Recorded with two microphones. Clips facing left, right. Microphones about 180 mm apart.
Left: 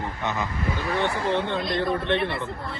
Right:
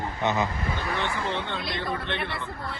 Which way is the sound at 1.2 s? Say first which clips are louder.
Left 6 dB; 55° left (ahead or behind).